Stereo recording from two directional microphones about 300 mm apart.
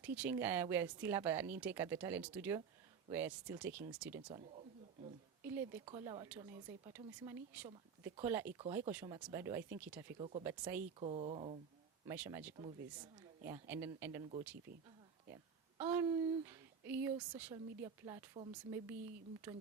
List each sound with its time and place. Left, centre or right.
0.0 s speech: centre
4.3 s speech: centre
5.5 s speech: centre
11.0 s speech: centre
12.0 s speech: centre
15.8 s speech: centre